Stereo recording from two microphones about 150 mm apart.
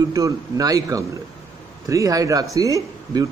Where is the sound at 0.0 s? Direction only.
25° right (ahead or behind).